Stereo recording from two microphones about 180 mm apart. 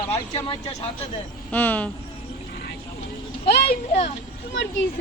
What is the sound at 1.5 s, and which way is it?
Speech, 10° left (ahead or behind).